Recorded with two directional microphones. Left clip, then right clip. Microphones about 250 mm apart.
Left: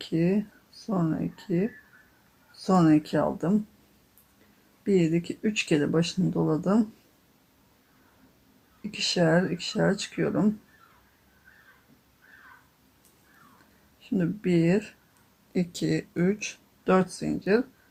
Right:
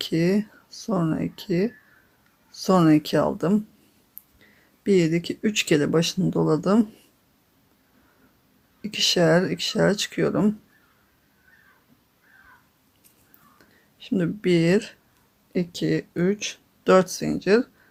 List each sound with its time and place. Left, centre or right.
0.0 s speech: right
4.8 s speech: right
8.8 s speech: right
14.2 s speech: right
15.5 s speech: centre